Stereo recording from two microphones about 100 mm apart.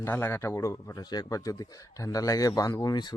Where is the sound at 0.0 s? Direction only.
25° left (ahead or behind).